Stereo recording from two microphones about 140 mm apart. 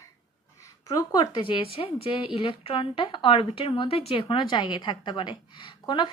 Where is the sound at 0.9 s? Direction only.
25° left (ahead or behind).